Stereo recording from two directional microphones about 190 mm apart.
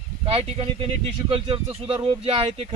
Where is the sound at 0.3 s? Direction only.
30° right (ahead or behind).